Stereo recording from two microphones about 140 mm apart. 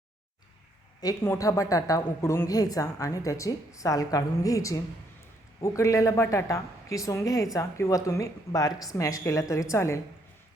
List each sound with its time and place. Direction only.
1.0 s a woman's voice: 20° left (ahead or behind)